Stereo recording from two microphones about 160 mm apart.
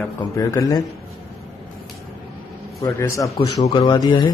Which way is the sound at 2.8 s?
20° left (ahead or behind).